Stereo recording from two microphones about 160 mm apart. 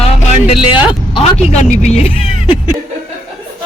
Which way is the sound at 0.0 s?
40° left (ahead or behind).